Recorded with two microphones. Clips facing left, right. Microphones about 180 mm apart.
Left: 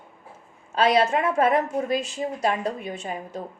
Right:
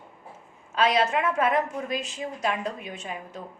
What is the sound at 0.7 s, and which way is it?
A woman's voice, 35° left (ahead or behind).